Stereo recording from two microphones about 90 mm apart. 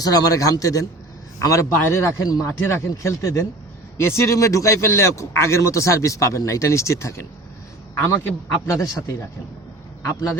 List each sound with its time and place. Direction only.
0.0 s speech: 45° left (ahead or behind)
2.5 s speech: 25° left (ahead or behind)
8.6 s a man's voice: 35° left (ahead or behind)